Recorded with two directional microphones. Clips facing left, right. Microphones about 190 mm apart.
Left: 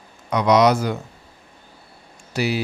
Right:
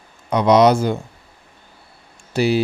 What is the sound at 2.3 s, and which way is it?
Speech, 30° right (ahead or behind).